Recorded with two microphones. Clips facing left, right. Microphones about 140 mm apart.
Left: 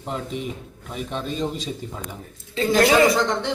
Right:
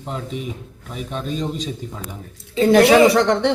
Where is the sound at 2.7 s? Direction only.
65° right (ahead or behind).